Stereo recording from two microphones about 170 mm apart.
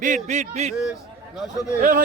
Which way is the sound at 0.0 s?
45° right (ahead or behind).